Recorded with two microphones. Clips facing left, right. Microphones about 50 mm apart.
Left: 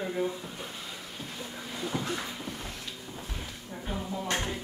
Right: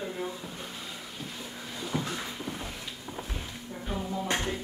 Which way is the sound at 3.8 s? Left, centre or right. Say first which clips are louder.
Right 1 dB; centre.